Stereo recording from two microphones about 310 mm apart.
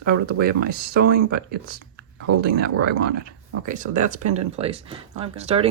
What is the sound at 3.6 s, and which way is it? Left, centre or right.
Speech, right.